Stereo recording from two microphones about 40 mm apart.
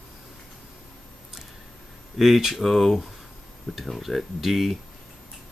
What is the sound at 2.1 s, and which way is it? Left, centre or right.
Speech, centre.